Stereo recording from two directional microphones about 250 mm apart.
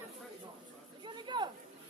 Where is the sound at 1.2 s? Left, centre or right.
Centre.